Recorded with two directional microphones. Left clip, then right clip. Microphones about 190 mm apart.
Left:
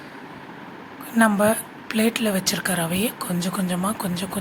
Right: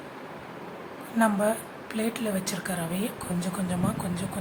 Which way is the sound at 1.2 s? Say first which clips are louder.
Left 6 dB; 20° left (ahead or behind).